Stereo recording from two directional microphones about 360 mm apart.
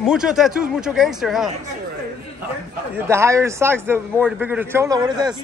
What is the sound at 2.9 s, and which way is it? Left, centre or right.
A man's voice, centre.